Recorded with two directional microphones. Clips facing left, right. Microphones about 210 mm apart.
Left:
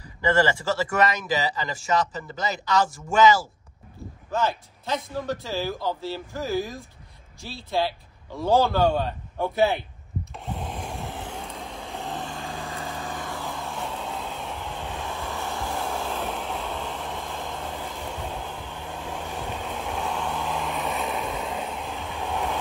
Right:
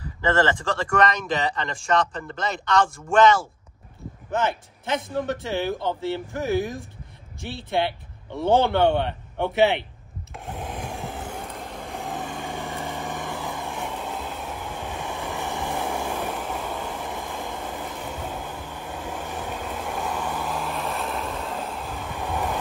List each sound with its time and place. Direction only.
0.0 s speech: 10° left (ahead or behind)
4.3 s speech: 20° right (ahead or behind)
8.4 s speech: 20° right (ahead or behind)
10.3 s vacuum cleaner: 5° right (ahead or behind)